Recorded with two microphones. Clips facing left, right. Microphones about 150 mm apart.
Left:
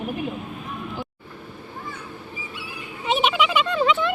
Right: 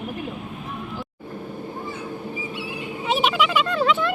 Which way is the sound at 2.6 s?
25° right (ahead or behind).